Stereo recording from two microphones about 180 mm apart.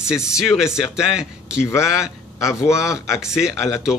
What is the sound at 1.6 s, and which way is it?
Speech, 15° left (ahead or behind).